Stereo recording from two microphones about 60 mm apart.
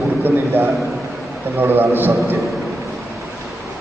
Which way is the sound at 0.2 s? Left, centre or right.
Right.